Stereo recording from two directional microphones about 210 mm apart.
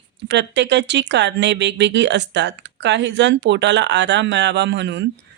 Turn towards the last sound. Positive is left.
turn(degrees=-55)  # may be behind; listen again after turning